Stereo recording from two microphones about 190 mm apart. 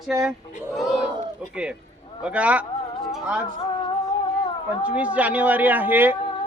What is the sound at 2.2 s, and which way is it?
A man's voice, 5° right (ahead or behind).